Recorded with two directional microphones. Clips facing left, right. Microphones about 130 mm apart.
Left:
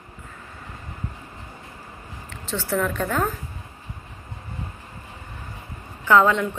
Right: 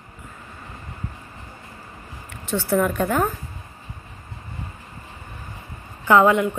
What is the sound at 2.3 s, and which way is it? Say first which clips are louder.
Speech: right 4 dB; 15° right (ahead or behind).